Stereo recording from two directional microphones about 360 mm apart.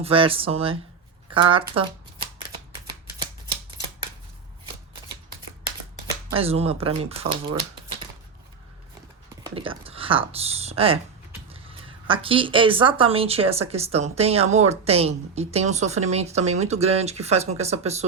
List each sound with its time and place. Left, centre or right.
0.0 s speech: centre
6.3 s speech: centre
9.4 s speech: centre